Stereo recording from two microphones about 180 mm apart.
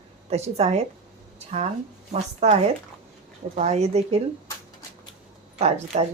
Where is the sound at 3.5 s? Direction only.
35° right (ahead or behind).